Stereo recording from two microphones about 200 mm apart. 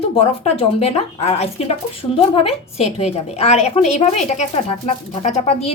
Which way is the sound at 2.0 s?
20° left (ahead or behind).